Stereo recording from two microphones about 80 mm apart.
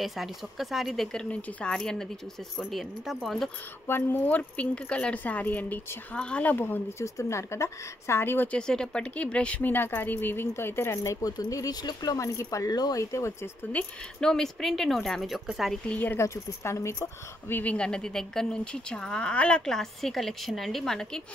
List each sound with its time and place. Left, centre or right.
0.0 s speech: centre
3.8 s speech: left
7.0 s speech: left
8.5 s speech: centre
9.7 s speech: left
11.1 s speech: left
13.1 s speech: left
13.8 s speech: centre
14.2 s speech: centre
15.9 s speech: left
16.2 s speech: left
17.7 s speech: centre